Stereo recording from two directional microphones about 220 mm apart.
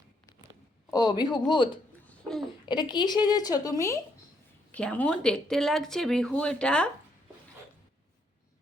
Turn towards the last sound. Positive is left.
turn(degrees=5)  # may be behind; listen again after turning